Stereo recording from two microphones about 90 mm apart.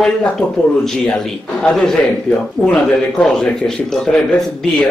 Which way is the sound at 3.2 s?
10° left (ahead or behind).